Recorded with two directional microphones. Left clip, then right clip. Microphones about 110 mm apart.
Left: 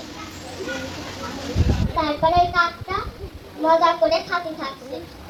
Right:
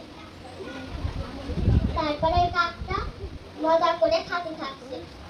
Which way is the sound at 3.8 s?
Centre (ahead or behind).